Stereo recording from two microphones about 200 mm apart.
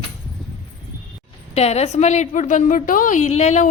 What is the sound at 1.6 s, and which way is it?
A woman's voice, 30° left (ahead or behind).